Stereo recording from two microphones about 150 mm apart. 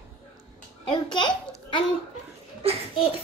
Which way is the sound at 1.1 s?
30° left (ahead or behind).